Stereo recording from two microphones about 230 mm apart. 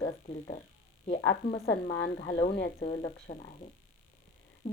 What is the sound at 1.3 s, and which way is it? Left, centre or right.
Speech, left.